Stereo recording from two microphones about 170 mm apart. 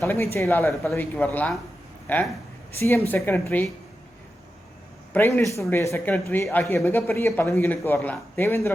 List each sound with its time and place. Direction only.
0.0 s speech: 15° left (ahead or behind)
0.7 s a man's voice: centre (ahead or behind)
5.1 s speech: 15° left (ahead or behind)